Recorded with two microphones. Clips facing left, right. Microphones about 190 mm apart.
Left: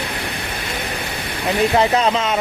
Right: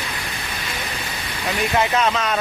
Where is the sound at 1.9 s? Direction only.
35° left (ahead or behind).